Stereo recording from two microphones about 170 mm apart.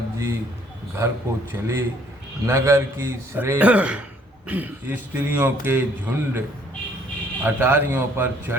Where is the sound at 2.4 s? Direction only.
15° right (ahead or behind).